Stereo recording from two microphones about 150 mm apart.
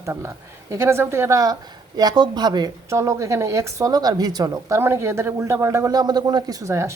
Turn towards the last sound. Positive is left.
turn(degrees=-20)  # may be behind; listen again after turning